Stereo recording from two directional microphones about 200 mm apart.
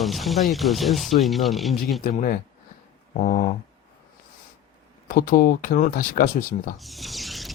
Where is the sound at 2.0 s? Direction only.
40° left (ahead or behind).